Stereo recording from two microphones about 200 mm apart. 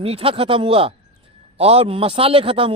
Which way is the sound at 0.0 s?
30° right (ahead or behind).